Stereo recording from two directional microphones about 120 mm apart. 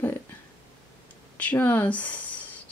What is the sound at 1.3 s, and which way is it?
Speech, 15° left (ahead or behind).